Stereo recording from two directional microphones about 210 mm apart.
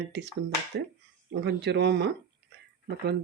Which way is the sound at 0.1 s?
55° right (ahead or behind).